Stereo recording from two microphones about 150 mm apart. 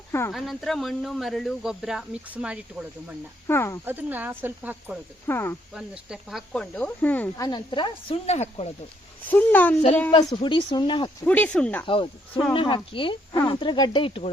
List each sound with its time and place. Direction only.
0.3 s speech: centre (ahead or behind)
3.4 s speech: 15° left (ahead or behind)
3.8 s speech: 10° right (ahead or behind)
5.2 s speech: 15° left (ahead or behind)
5.7 s speech: 5° right (ahead or behind); by 7.4 s 10° left (ahead or behind)
7.4 s speech: 30° left (ahead or behind)
8.3 s speech: 45° left (ahead or behind)
9.3 s speech: 10° left (ahead or behind)
10.2 s speech: 30° left (ahead or behind)
11.3 s speech: 10° left (ahead or behind)
11.9 s speech: 35° left (ahead or behind)